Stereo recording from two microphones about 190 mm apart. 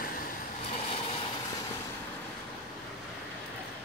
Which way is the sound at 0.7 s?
30° left (ahead or behind).